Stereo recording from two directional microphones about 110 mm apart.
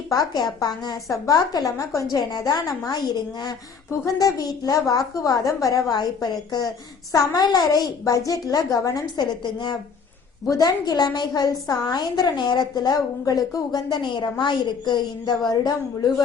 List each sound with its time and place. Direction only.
0.1 s a woman's voice: 35° left (ahead or behind)
4.0 s a woman's voice: 35° left (ahead or behind)